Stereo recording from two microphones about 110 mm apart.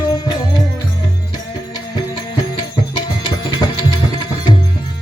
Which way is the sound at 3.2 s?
45° left (ahead or behind).